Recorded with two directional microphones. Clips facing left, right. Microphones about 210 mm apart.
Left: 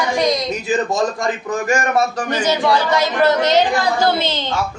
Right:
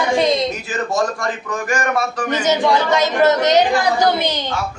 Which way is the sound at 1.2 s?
25° left (ahead or behind).